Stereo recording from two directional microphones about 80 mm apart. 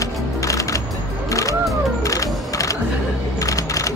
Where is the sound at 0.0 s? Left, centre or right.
Left.